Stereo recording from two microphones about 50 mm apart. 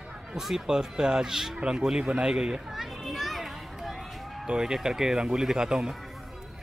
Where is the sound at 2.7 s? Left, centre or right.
Centre.